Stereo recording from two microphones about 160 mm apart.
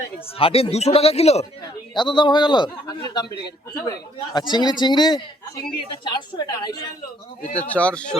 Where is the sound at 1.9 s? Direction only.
30° left (ahead or behind).